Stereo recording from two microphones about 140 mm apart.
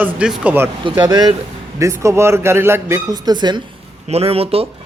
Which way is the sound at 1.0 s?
30° right (ahead or behind).